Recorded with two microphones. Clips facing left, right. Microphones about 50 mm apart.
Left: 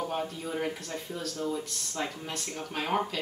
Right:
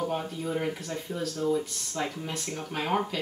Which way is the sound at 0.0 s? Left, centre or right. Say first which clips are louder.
Right 2 dB; centre.